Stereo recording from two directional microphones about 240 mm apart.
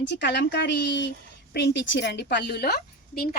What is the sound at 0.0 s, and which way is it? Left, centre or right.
Speech, left.